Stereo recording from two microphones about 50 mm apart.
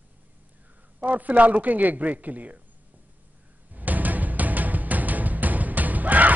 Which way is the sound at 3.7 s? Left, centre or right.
Right.